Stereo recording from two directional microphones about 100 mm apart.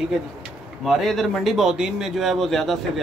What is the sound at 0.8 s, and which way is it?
A man's voice, centre (ahead or behind).